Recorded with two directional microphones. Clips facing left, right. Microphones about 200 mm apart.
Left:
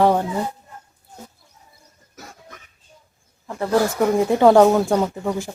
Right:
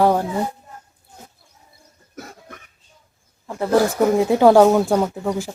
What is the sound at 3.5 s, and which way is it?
Speech, 5° right (ahead or behind).